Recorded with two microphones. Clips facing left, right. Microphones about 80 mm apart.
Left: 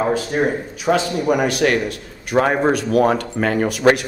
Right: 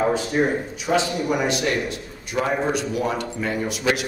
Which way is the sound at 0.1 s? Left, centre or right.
Left.